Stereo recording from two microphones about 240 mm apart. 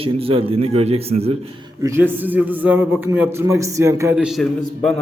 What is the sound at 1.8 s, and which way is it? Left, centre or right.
A man's voice, centre.